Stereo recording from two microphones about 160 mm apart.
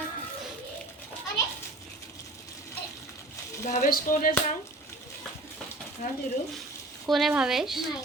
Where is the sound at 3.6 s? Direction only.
55° left (ahead or behind).